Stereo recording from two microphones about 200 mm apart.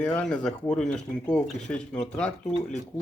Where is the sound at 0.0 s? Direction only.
5° left (ahead or behind).